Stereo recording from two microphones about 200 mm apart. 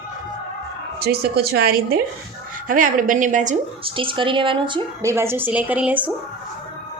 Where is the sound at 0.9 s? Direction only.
50° right (ahead or behind).